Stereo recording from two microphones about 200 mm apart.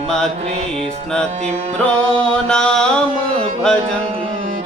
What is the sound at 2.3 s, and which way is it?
Mantra, 5° left (ahead or behind).